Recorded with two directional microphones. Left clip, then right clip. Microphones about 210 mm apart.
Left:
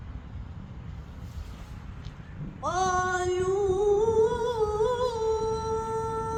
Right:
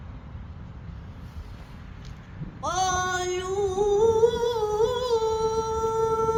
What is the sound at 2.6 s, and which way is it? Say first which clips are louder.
Singing: right 1 dB; 40° right (ahead or behind).